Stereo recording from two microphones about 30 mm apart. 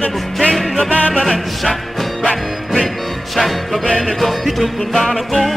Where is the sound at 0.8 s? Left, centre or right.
Left.